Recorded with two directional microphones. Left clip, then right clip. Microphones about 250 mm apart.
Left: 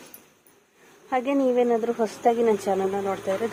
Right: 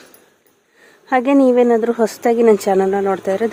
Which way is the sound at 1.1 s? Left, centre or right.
Right.